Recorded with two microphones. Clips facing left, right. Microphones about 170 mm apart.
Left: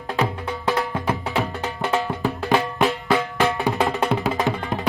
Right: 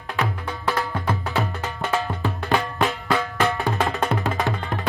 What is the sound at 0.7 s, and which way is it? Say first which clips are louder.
Music: left 2 dB; 20° left (ahead or behind).